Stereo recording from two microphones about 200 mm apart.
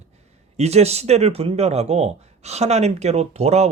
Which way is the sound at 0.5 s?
30° right (ahead or behind).